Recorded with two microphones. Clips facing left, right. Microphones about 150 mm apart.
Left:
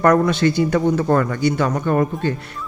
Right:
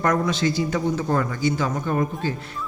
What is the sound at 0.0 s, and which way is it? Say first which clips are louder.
Speech: left 6 dB; 60° left (ahead or behind).